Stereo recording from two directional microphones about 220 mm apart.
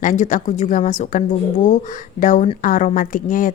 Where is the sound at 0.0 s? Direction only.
35° left (ahead or behind).